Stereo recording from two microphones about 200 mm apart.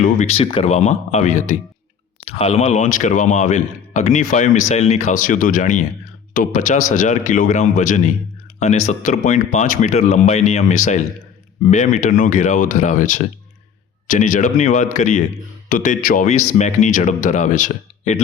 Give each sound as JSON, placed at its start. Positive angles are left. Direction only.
{"t": 0.0, "sound": "speech", "side_deg": 35}